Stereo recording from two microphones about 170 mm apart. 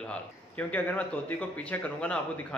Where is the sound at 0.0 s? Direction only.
5° left (ahead or behind).